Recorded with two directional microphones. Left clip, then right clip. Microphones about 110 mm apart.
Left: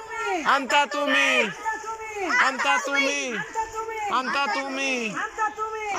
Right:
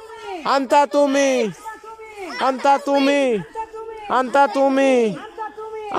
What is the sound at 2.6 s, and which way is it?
Speech, 85° right.